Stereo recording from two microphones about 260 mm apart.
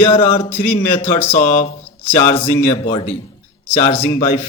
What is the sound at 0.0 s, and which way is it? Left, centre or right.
Speech, left.